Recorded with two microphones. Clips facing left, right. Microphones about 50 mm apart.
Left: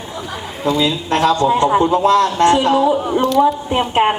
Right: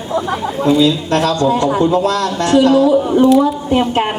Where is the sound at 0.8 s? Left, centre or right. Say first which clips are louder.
Right 3 dB; left.